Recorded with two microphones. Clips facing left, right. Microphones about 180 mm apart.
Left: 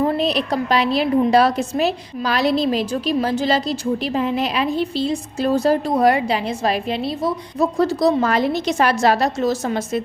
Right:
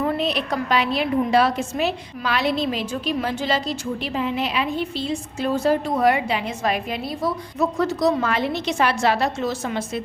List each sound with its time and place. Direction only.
0.0 s a woman's voice: 35° left (ahead or behind)